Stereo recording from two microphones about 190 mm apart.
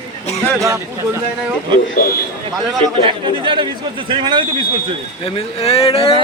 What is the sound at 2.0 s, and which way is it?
Speech, 50° left (ahead or behind).